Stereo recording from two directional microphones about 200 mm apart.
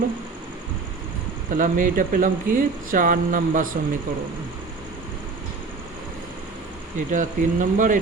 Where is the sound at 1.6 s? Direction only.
45° right (ahead or behind).